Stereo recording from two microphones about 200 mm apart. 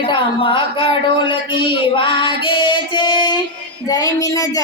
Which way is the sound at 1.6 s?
25° left (ahead or behind).